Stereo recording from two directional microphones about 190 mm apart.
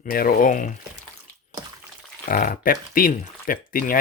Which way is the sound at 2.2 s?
45° left (ahead or behind).